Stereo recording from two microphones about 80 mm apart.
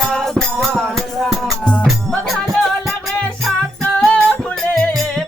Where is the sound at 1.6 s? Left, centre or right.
Centre.